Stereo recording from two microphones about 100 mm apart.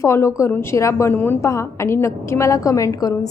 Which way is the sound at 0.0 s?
30° left (ahead or behind).